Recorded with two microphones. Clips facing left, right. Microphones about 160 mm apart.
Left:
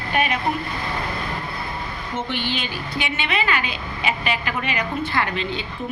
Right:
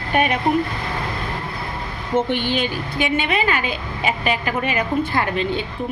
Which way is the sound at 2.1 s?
50° right (ahead or behind).